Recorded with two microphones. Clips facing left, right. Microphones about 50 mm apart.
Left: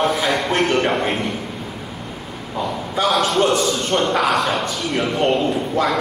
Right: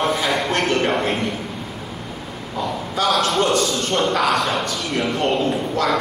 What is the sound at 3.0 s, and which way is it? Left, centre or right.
A man's voice, centre.